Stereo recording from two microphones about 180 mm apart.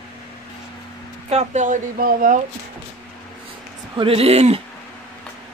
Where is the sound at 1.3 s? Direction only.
40° right (ahead or behind).